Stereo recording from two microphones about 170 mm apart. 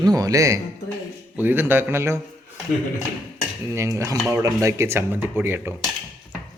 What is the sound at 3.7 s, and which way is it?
Speech, 20° right (ahead or behind).